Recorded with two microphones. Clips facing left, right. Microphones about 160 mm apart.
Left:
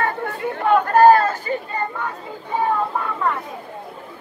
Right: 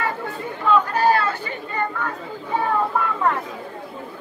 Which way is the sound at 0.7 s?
55° left (ahead or behind).